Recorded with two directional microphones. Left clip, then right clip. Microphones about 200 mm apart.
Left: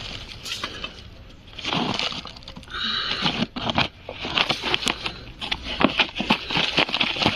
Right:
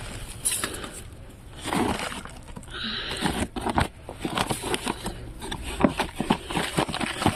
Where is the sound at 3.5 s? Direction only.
20° right (ahead or behind).